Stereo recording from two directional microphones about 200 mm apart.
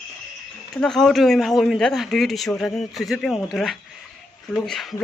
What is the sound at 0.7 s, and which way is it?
A man's voice, centre (ahead or behind).